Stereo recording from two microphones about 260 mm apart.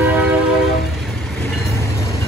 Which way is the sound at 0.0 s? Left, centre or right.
Centre.